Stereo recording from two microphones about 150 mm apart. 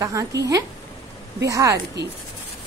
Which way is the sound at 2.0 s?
90° right.